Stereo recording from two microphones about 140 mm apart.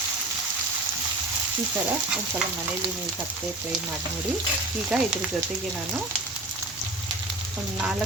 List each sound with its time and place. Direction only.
4.9 s frying: 5° right (ahead or behind)